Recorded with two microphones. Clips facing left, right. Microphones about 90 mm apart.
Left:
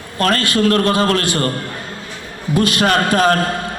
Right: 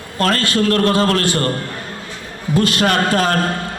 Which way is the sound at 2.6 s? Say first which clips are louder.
Left 2 dB; 15° left (ahead or behind).